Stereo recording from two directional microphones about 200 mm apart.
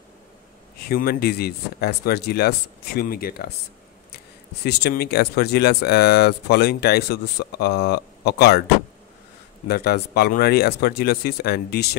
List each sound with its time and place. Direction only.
0.8 s speech: 50° left (ahead or behind)
4.6 s speech: 55° left (ahead or behind)
9.7 s speech: 55° left (ahead or behind)